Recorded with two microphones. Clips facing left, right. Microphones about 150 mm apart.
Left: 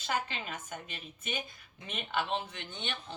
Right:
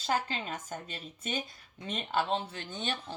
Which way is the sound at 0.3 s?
35° right (ahead or behind).